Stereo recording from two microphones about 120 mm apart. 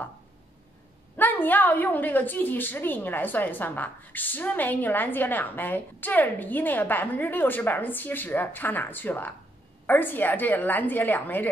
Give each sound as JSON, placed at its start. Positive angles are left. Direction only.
{"t": 1.1, "sound": "a woman's voice", "side_deg": 15}